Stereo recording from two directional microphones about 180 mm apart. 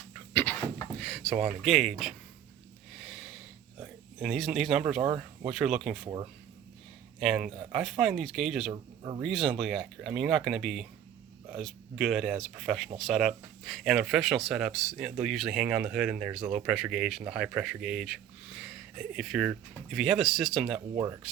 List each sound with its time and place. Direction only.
0.3 s a sound: 10° left (ahead or behind); by 5.1 s 5° right (ahead or behind)
5.5 s speech: 5° right (ahead or behind)
7.2 s speech: centre (ahead or behind)
8.7 s speech: 25° right (ahead or behind)
9.2 s speech: centre (ahead or behind)